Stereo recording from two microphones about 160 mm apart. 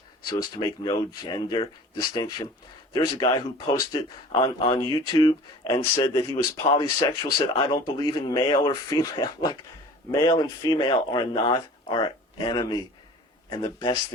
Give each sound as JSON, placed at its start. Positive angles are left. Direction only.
{"t": 0.6, "sound": "speech", "side_deg": 25}
{"t": 6.1, "sound": "speech", "side_deg": 15}
{"t": 6.7, "sound": "speech", "side_deg": 30}